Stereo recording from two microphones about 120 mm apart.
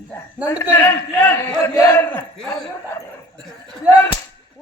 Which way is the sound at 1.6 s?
30° left (ahead or behind).